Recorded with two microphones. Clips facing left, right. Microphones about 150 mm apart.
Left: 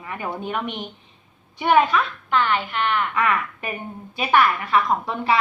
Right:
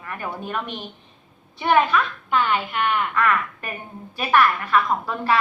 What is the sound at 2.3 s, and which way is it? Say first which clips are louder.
Speech: even; 10° right (ahead or behind).